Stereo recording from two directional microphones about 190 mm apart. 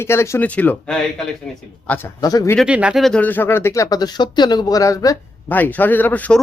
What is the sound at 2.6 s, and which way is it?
A man's voice, 5° right (ahead or behind).